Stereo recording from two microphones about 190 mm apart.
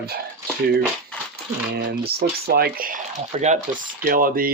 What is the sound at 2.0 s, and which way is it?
Speech, 55° right (ahead or behind).